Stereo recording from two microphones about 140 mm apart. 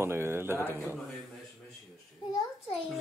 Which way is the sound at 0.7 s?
Centre (ahead or behind).